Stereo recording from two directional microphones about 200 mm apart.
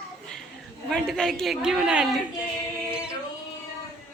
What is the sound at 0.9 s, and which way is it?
Speech, 5° left (ahead or behind).